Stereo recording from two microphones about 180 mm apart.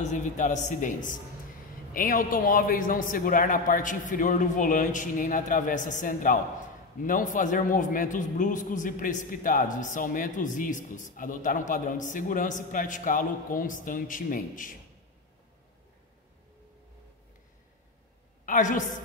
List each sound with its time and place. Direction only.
0.0 s a man's voice: 40° left (ahead or behind)
18.4 s a woman's voice: 45° left (ahead or behind)